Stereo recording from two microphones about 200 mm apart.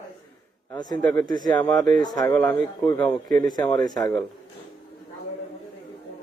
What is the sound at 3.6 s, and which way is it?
Speech, 20° left (ahead or behind).